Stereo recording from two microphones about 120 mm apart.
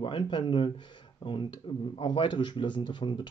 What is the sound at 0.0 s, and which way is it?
Speech, 40° left (ahead or behind).